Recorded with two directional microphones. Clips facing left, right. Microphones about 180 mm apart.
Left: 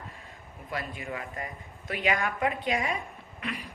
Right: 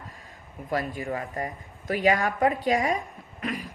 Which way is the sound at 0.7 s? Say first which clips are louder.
Right 7 dB; 40° right (ahead or behind).